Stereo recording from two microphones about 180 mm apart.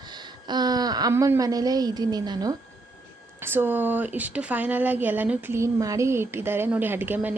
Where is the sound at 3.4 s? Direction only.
10° right (ahead or behind).